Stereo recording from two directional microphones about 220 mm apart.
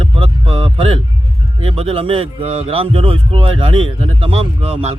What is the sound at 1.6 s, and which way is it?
Speech, 25° right (ahead or behind).